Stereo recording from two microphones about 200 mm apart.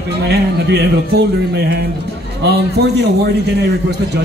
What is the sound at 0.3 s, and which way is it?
Speech, 55° right (ahead or behind).